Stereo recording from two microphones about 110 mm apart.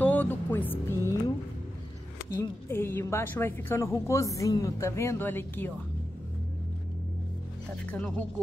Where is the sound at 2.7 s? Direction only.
20° left (ahead or behind).